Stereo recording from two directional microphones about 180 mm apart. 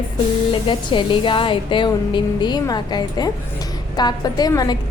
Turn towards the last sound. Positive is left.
turn(degrees=20)  # may be behind; listen again after turning